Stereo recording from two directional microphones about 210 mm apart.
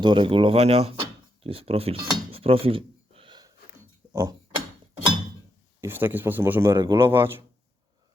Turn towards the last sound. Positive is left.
turn(degrees=-10)  # may be behind; listen again after turning